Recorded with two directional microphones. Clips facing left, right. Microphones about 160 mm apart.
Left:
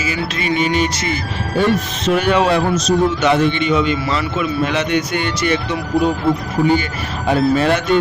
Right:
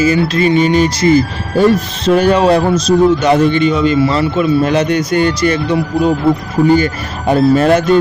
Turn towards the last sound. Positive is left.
turn(degrees=-40)  # may be behind; listen again after turning